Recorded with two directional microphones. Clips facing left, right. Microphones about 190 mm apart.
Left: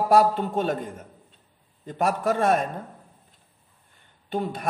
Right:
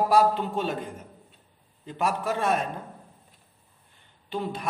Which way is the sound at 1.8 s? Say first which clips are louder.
Left 4 dB; 50° left (ahead or behind).